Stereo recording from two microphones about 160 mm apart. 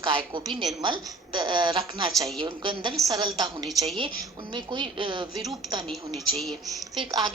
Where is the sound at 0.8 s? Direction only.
30° right (ahead or behind).